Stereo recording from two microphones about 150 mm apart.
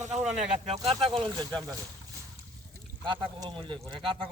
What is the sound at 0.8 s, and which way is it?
Speech, 40° right (ahead or behind).